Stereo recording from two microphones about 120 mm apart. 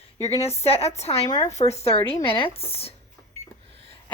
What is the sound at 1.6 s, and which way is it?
Speech, 65° left (ahead or behind).